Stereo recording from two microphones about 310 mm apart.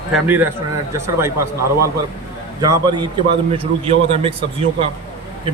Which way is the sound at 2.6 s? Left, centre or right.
Centre.